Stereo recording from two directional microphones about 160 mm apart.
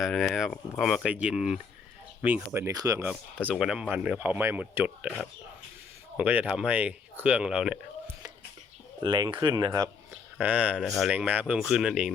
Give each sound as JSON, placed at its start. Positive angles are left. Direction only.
{"t": 0.0, "sound": "speech", "side_deg": 0}
{"t": 3.1, "sound": "speech", "side_deg": -10}
{"t": 6.1, "sound": "speech", "side_deg": -10}
{"t": 9.0, "sound": "speech", "side_deg": -25}
{"t": 10.4, "sound": "speech", "side_deg": -10}